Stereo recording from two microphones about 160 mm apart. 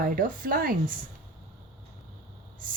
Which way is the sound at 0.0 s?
60° right (ahead or behind).